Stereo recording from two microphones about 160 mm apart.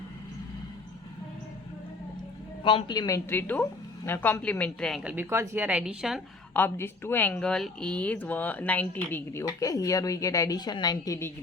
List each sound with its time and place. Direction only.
2.6 s a woman's voice: 30° left (ahead or behind)
3.2 s speech: 10° left (ahead or behind)
5.1 s speech: 15° right (ahead or behind)
6.5 s speech: 15° left (ahead or behind)